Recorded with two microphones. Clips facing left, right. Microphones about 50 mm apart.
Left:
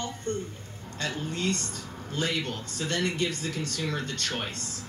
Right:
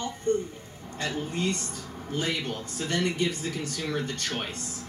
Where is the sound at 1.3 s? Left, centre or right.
Centre.